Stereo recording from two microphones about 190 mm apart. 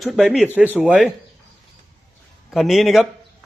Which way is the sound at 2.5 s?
Centre (ahead or behind).